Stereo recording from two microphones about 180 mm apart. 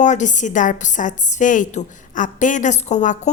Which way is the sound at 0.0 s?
45° left (ahead or behind).